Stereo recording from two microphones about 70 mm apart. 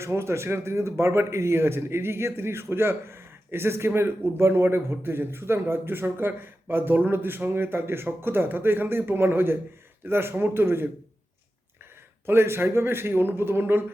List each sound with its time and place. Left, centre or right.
0.0 s speech: right
12.2 s speech: right